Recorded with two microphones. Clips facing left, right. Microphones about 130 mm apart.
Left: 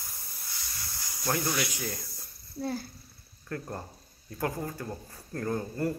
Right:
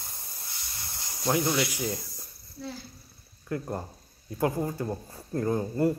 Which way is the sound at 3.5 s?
15° right (ahead or behind).